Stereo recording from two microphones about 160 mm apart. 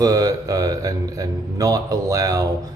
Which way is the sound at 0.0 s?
20° right (ahead or behind).